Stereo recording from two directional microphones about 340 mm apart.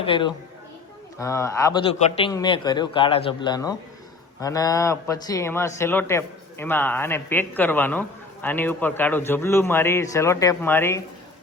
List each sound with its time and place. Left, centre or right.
0.0 s speech: centre